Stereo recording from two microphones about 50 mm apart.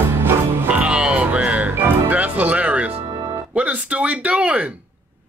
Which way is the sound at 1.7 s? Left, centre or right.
Right.